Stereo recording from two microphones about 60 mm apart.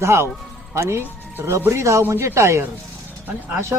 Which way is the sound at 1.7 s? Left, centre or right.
Right.